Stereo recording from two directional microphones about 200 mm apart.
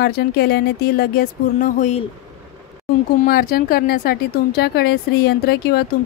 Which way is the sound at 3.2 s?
50° left (ahead or behind).